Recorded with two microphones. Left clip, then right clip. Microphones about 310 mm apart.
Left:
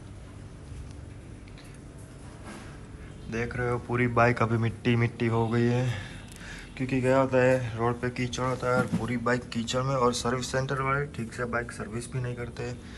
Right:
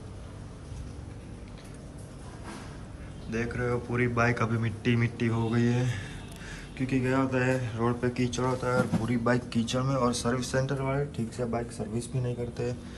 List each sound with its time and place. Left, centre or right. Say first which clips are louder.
3.3 s a man's voice: left 1 dB; centre